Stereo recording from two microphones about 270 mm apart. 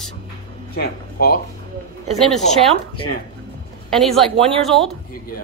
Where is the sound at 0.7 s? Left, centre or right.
Left.